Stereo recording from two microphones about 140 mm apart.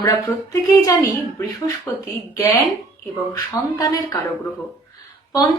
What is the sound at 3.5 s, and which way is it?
Speech, 25° left (ahead or behind).